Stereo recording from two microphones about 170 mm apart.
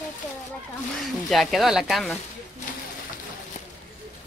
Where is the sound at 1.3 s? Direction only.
Centre (ahead or behind).